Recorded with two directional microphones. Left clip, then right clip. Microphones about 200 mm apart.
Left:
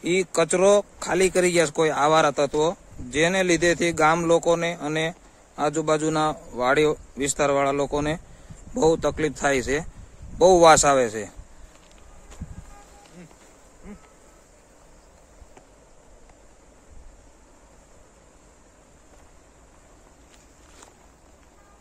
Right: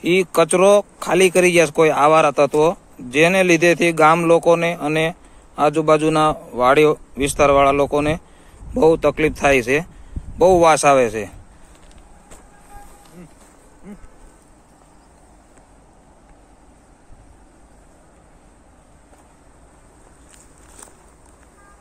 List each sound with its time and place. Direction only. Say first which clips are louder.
0.0 s speech: right 6 dB; centre (ahead or behind)